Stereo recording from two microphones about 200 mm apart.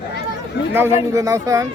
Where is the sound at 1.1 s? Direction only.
15° right (ahead or behind).